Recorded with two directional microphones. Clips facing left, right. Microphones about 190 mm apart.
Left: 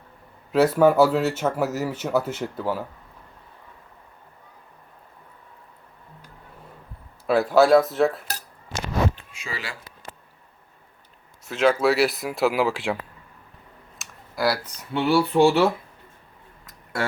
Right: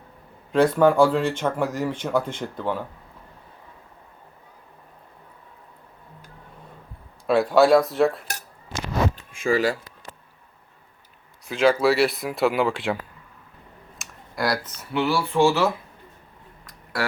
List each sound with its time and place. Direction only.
0.5 s speech: 5° left (ahead or behind)
7.3 s speech: centre (ahead or behind)
9.1 s a sound: 50° right (ahead or behind)
11.4 s speech: centre (ahead or behind)
14.0 s clicking: 5° left (ahead or behind)
15.1 s speech: 35° left (ahead or behind)
16.6 s a sound: 25° left (ahead or behind)